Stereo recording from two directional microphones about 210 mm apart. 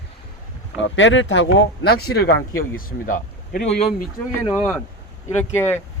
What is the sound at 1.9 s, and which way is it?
Speech, 50° left (ahead or behind).